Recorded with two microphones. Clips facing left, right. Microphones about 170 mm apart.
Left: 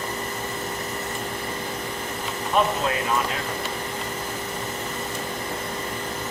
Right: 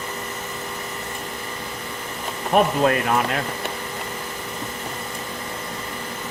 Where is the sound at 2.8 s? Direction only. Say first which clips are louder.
Right 6 dB; 60° right (ahead or behind).